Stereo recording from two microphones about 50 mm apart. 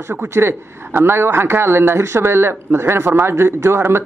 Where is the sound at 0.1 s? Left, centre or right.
Right.